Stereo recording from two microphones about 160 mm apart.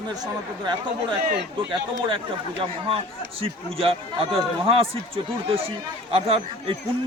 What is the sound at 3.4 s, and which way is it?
A man's voice, 35° right (ahead or behind).